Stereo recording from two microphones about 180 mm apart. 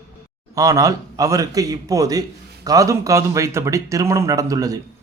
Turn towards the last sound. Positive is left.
turn(degrees=-20)  # may be behind; listen again after turning